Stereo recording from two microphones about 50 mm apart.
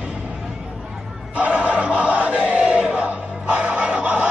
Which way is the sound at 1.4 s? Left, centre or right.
Right.